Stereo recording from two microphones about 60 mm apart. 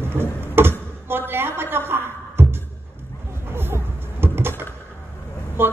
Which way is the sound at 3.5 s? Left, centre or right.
Right.